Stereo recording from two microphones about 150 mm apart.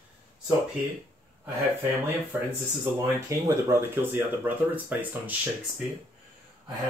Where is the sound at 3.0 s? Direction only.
20° right (ahead or behind).